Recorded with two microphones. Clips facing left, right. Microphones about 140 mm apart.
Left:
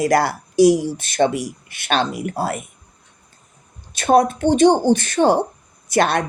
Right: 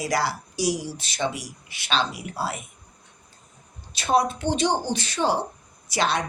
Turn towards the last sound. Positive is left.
turn(degrees=55)  # may be behind; listen again after turning